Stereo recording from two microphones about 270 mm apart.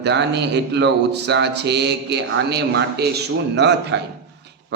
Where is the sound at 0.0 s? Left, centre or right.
Right.